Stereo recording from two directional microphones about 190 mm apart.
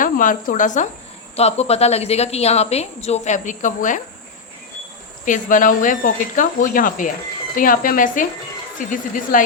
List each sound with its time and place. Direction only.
0.0 s a woman's voice: 45° left (ahead or behind)
5.2 s speech: 45° left (ahead or behind)